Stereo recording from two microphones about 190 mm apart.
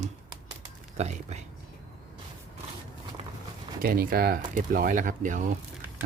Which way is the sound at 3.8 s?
50° right (ahead or behind).